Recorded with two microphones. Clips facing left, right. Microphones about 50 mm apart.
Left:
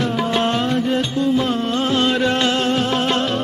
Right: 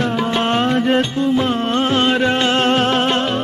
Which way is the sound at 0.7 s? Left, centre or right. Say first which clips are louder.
Right 3 dB; right.